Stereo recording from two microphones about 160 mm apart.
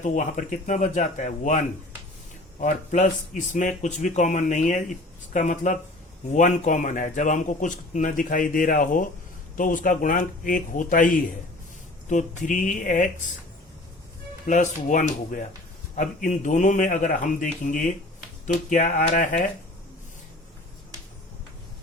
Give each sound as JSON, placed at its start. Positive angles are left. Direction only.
{"t": 0.0, "sound": "speech", "side_deg": 50}
{"t": 14.4, "sound": "speech", "side_deg": 50}